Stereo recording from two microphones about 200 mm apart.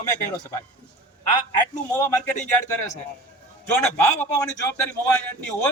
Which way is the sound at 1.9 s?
10° left (ahead or behind).